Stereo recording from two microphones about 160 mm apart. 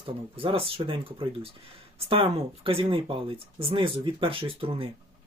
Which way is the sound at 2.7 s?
35° right (ahead or behind).